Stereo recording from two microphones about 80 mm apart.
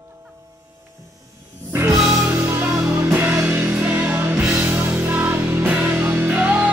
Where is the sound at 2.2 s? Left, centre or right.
Right.